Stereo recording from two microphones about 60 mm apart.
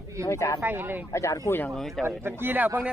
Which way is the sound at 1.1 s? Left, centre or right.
Left.